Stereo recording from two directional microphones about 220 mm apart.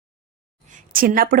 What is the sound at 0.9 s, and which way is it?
Speech, 40° right (ahead or behind).